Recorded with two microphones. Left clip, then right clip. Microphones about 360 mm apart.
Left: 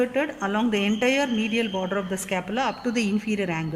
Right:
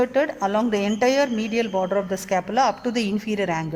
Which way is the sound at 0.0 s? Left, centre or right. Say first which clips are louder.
Right 4 dB; right.